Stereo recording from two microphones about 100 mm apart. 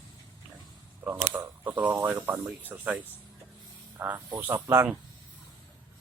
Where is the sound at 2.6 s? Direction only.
15° right (ahead or behind).